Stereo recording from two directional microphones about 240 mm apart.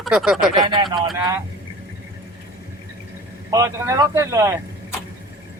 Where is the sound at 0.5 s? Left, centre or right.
Centre.